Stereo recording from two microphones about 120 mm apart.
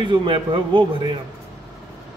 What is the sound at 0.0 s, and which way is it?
Speech, 45° right (ahead or behind).